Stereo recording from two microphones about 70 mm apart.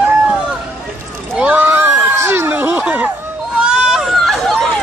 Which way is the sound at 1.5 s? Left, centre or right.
Right.